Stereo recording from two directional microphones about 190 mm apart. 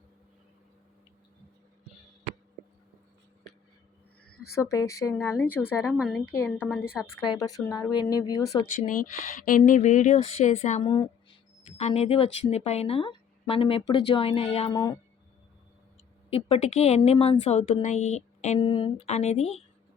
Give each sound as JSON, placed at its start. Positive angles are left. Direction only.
{"t": 4.5, "sound": "speech", "side_deg": 15}
{"t": 5.9, "sound": "a woman's voice", "side_deg": 0}
{"t": 8.7, "sound": "speech", "side_deg": 45}
{"t": 10.8, "sound": "speech", "side_deg": 20}
{"t": 11.8, "sound": "speech", "side_deg": 35}
{"t": 16.3, "sound": "speech", "side_deg": 35}